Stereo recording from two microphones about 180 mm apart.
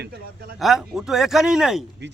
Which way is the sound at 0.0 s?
65° right (ahead or behind).